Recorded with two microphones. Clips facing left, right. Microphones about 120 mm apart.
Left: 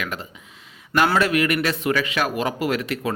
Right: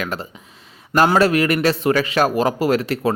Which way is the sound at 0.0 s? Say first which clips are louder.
Right 4 dB; 35° right (ahead or behind).